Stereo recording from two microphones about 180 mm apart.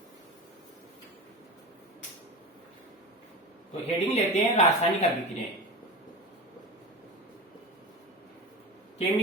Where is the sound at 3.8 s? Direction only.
35° left (ahead or behind).